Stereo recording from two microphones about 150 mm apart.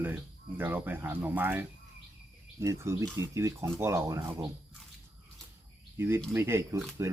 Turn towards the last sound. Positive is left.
turn(degrees=-20)  # may be behind; listen again after turning